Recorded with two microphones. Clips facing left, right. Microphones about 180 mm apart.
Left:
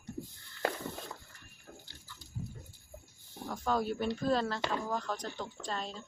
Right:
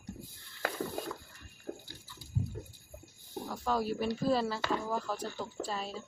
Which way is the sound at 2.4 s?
35° right (ahead or behind).